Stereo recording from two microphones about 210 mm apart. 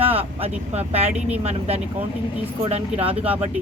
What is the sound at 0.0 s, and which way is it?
Vehicle, 25° right (ahead or behind).